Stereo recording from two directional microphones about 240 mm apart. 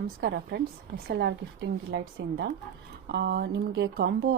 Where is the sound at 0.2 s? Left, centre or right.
Right.